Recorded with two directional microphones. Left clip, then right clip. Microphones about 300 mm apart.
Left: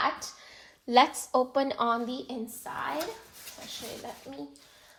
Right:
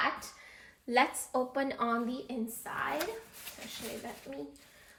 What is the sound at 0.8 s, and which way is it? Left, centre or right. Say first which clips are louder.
A woman's voice: left 6 dB; centre.